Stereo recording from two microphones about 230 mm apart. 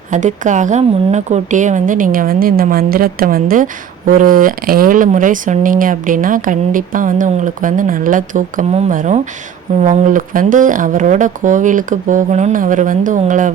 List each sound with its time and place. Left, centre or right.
0.1 s a woman's voice: right